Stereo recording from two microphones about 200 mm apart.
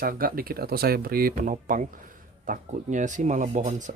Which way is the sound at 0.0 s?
45° right (ahead or behind).